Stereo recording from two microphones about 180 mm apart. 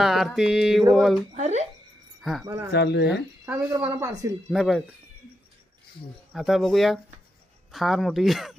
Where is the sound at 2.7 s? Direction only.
70° left (ahead or behind).